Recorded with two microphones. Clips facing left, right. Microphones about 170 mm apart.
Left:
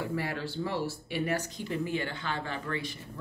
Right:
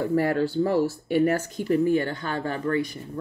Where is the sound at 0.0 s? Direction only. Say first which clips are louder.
Right 11 dB; 45° right (ahead or behind).